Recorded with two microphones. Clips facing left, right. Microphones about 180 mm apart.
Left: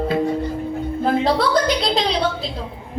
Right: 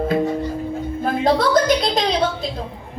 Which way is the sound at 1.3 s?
45° right (ahead or behind).